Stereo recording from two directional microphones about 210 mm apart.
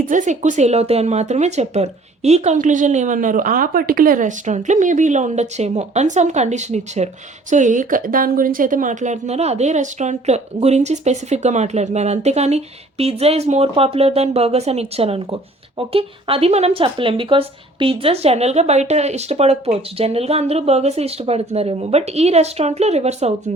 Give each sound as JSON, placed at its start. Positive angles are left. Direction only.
{"t": 0.0, "sound": "speech", "side_deg": -40}